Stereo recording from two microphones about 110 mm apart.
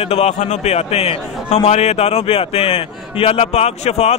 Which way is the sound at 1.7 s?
80° left.